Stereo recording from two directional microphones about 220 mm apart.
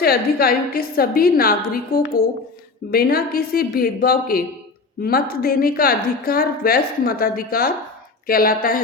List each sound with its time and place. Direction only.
0.0 s a woman's voice: 45° left (ahead or behind)